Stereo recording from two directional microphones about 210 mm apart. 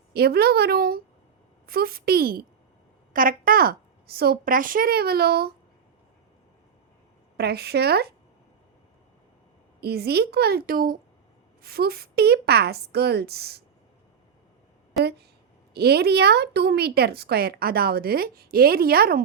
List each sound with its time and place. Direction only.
0.1 s a woman's voice: 50° right (ahead or behind)
7.3 s a woman's voice: 50° right (ahead or behind)
9.8 s a woman's voice: 50° right (ahead or behind)
15.7 s a woman's voice: 50° right (ahead or behind)